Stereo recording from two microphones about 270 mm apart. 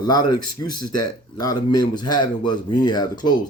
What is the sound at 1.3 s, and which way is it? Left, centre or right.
Speech, centre.